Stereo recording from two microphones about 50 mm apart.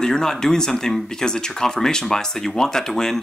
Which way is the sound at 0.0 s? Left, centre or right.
Centre.